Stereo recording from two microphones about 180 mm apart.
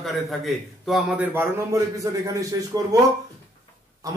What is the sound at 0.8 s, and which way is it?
Speech, 5° right (ahead or behind).